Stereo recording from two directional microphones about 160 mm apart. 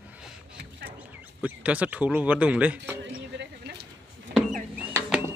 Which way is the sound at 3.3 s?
90° right.